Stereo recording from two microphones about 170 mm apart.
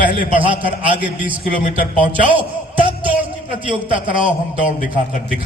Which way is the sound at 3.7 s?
30° right (ahead or behind).